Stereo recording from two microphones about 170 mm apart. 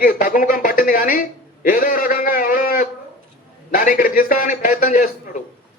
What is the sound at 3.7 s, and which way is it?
A man's voice, 55° left (ahead or behind).